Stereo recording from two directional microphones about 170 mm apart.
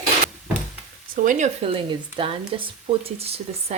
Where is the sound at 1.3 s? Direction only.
45° right (ahead or behind).